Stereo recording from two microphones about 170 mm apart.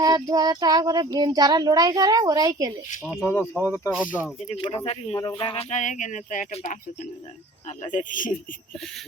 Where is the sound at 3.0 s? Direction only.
10° right (ahead or behind).